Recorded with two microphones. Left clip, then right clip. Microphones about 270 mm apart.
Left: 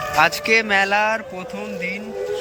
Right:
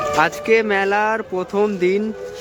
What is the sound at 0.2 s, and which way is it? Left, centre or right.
Speech, centre.